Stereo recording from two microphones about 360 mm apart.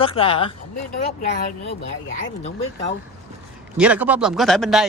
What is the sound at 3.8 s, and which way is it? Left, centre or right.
Speech, centre.